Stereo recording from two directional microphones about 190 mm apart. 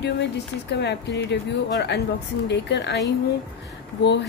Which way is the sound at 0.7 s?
65° left (ahead or behind).